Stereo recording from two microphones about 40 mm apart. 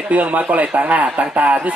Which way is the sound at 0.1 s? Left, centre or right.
Right.